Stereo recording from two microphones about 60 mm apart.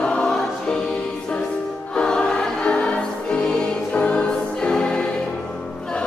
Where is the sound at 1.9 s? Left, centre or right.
Centre.